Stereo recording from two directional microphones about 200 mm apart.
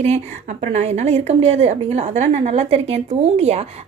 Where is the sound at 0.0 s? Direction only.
35° right (ahead or behind).